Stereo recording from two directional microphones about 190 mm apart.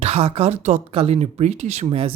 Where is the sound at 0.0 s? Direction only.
30° right (ahead or behind).